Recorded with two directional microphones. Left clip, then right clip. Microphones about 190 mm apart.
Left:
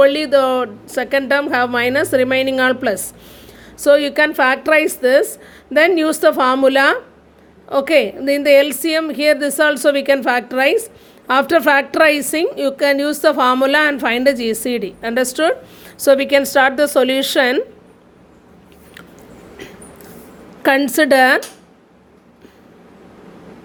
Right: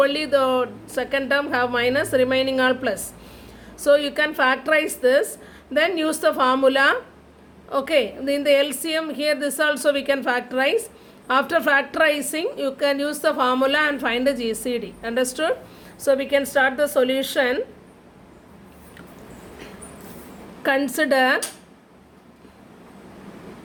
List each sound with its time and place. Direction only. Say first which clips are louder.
0.0 s a woman's voice: left 7 dB; 40° left (ahead or behind)
20.6 s a woman's voice: left 7 dB; 45° left (ahead or behind)